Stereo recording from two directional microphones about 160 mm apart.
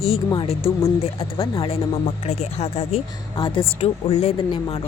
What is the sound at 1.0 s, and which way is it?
Speech, 35° left (ahead or behind).